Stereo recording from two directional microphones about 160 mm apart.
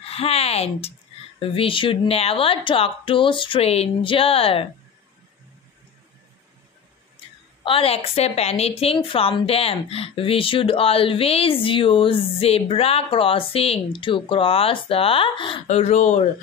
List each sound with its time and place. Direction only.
0.0 s a woman's voice: 40° left (ahead or behind)
7.6 s a woman's voice: 35° left (ahead or behind)
15.6 s speech: 40° left (ahead or behind)